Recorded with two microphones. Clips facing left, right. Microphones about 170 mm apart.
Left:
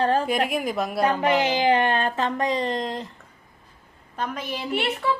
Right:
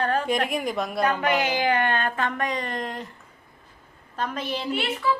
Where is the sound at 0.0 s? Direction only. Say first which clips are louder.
Left 3 dB; 30° left (ahead or behind).